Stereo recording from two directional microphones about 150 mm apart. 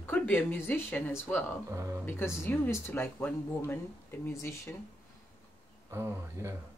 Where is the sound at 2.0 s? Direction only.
15° left (ahead or behind).